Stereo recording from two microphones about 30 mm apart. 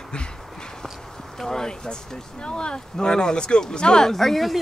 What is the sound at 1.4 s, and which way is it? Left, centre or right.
Speech, left.